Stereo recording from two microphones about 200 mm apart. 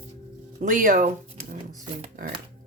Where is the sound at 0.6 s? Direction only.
40° right (ahead or behind).